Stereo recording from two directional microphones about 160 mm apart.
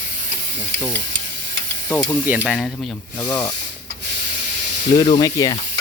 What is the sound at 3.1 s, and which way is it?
Speech, 25° left (ahead or behind).